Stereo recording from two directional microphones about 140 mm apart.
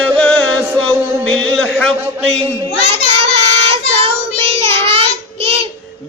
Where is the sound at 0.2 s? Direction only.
10° left (ahead or behind).